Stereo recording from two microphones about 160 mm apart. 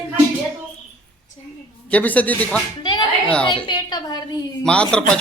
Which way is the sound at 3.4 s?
30° left (ahead or behind).